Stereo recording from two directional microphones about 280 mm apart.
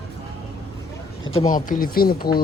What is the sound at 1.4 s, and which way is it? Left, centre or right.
Speech, left.